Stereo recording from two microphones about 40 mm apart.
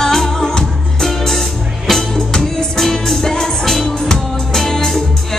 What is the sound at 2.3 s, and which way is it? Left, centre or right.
Music, centre.